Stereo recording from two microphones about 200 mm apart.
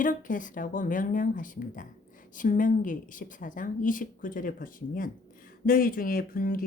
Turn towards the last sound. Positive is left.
turn(degrees=45)  # may be behind; listen again after turning